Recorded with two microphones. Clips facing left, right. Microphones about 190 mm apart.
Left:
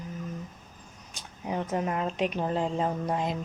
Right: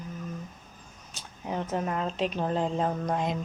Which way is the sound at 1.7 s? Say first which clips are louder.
Left 1 dB; 10° left (ahead or behind).